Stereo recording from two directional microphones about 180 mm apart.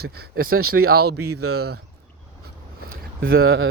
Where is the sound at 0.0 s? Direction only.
60° right (ahead or behind).